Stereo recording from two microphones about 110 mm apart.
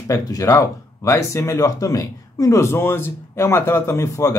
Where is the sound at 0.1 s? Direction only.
30° left (ahead or behind).